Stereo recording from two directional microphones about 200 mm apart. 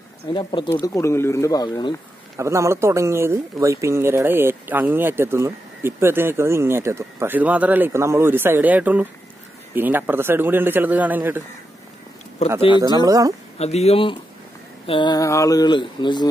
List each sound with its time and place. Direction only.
0.3 s speech: 25° left (ahead or behind)
2.3 s a man's voice: 15° right (ahead or behind)
12.7 s speech: 20° right (ahead or behind)
13.6 s speech: 30° left (ahead or behind)